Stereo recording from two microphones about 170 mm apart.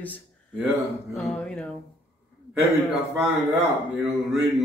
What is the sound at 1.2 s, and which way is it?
Speech, 5° left (ahead or behind).